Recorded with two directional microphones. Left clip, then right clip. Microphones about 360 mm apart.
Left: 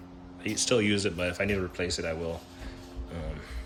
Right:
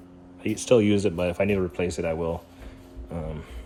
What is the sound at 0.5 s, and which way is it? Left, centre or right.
Speech, centre.